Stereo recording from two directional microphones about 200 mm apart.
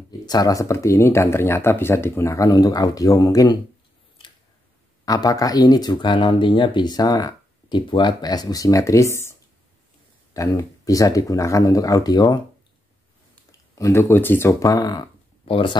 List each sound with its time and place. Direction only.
0.3 s speech: 20° left (ahead or behind)
5.0 s speech: 20° left (ahead or behind)
13.7 s speech: 15° left (ahead or behind)